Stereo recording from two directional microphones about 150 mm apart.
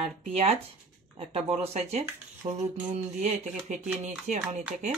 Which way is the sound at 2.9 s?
50° right (ahead or behind).